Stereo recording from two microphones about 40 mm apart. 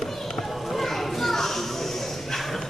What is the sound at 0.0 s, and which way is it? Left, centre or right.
Children playing, centre.